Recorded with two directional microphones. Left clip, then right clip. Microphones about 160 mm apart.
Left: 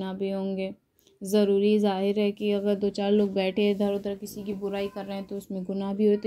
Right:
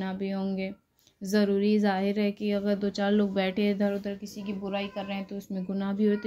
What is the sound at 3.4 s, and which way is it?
Speech, 40° right (ahead or behind).